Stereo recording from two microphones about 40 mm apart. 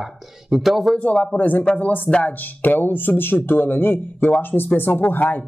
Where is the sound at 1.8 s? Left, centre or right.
Left.